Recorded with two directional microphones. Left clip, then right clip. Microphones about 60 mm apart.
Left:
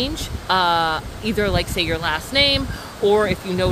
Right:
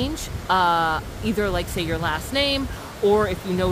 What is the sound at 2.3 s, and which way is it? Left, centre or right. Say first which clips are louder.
Speech: left 7 dB; right.